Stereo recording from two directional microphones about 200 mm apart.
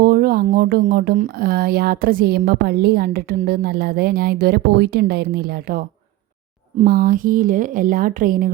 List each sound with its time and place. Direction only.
0.0 s speech: 50° right (ahead or behind)
6.8 s speech: 45° right (ahead or behind)